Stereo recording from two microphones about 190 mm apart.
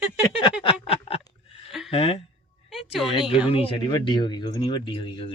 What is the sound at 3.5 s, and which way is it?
Speech, 25° left (ahead or behind).